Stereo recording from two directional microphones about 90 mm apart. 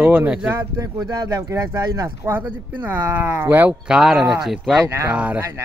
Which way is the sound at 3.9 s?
5° right (ahead or behind).